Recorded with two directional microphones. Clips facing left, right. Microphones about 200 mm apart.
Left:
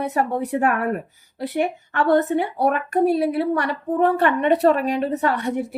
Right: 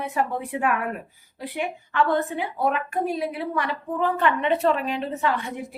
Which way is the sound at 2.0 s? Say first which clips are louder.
Left 7 dB; 65° left (ahead or behind).